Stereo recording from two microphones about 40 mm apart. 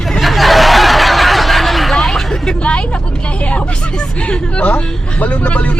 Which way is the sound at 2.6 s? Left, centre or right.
Left.